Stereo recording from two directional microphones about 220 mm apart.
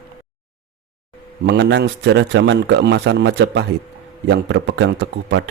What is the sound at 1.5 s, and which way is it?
Speech, 50° right (ahead or behind).